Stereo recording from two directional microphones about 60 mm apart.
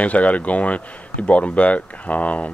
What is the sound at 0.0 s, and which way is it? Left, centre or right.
Speech, left.